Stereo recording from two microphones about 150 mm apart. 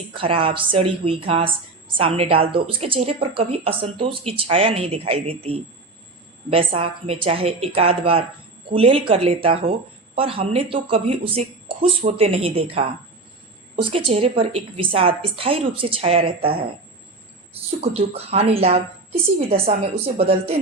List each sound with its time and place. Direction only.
0.1 s speech: 35° right (ahead or behind)
13.9 s speech: 40° right (ahead or behind)